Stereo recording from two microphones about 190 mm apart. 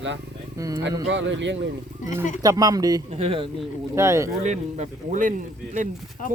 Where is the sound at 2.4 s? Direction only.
20° right (ahead or behind).